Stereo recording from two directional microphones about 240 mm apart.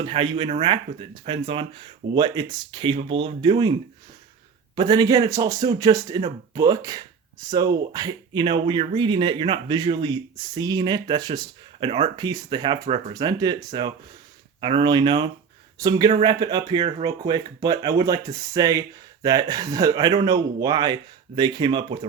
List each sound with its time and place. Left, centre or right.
0.0 s speech: right